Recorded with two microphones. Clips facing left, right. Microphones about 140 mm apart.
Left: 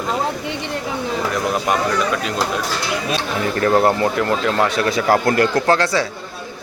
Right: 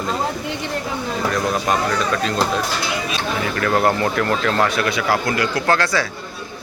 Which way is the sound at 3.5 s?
30° left (ahead or behind).